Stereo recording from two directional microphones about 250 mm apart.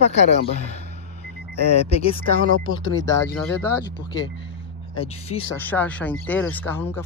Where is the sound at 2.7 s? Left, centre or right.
Left.